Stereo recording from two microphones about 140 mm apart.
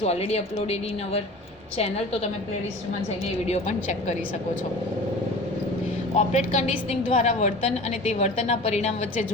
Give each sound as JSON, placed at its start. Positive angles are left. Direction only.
{"t": 0.0, "sound": "a woman's voice", "side_deg": 50}
{"t": 3.4, "sound": "a woman's voice", "side_deg": 55}
{"t": 6.1, "sound": "a woman's voice", "side_deg": 55}